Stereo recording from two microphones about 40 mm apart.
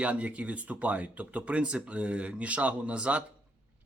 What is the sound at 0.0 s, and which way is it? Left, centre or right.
Speech, right.